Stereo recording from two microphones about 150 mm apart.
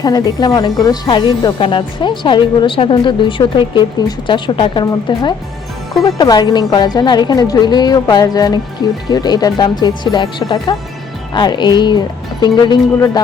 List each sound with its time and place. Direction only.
0.0 s a woman's voice: 25° left (ahead or behind)